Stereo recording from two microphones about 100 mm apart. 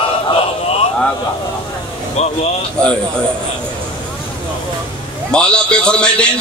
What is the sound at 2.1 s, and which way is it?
Speech, 90° left.